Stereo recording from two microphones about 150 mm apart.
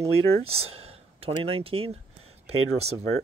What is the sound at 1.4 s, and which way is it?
Speech, 40° right (ahead or behind).